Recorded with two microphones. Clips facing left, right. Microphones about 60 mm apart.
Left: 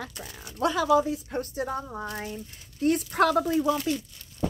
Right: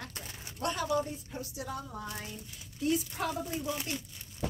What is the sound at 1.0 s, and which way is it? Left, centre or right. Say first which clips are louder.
Speech: left 11 dB; left.